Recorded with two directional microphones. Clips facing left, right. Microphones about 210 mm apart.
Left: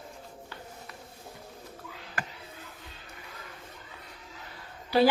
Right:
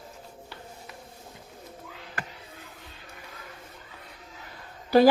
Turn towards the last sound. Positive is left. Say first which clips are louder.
# right 4 dB
turn(degrees=-45)  # may be behind; listen again after turning